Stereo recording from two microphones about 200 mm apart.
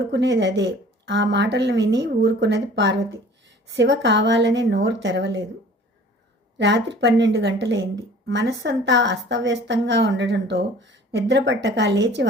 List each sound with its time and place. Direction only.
0.1 s speech: 60° right (ahead or behind)
6.6 s speech: 60° right (ahead or behind)